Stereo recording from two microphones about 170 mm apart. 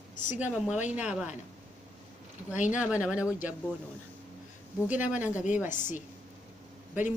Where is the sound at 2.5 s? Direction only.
45° left (ahead or behind).